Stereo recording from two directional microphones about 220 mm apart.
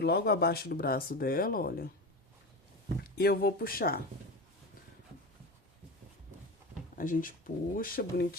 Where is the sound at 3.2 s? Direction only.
45° left (ahead or behind).